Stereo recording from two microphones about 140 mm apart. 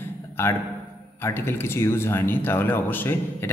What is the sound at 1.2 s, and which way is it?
Speech, 15° left (ahead or behind).